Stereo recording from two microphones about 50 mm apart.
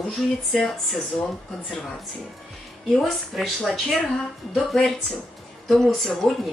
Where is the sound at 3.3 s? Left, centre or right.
Centre.